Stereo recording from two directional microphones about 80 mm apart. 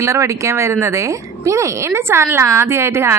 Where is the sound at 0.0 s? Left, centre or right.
Right.